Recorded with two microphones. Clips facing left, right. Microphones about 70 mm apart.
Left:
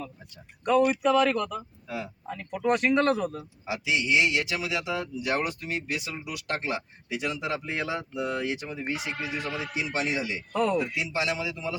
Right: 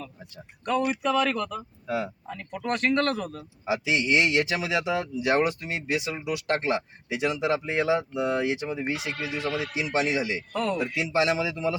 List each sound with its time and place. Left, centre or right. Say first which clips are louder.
1.0 s speech: left 2 dB; centre
3.7 s a man's voice: right 2 dB; right
8.9 s speech: right 1 dB; left
9.8 s a man's voice: right 4 dB; centre
10.5 s speech: left 4 dB; centre
10.9 s a man's voice: right 5 dB; right